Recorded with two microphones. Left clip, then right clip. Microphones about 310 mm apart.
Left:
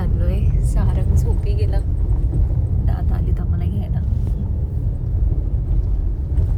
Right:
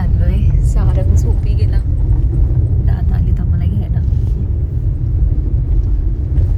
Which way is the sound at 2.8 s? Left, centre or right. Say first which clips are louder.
Right 3 dB; centre.